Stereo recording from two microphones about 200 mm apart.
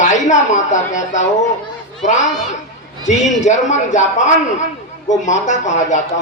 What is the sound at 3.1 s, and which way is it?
A man's voice, 35° left (ahead or behind).